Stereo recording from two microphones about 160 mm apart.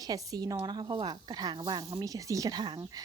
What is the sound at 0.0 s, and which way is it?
Speech, 25° right (ahead or behind).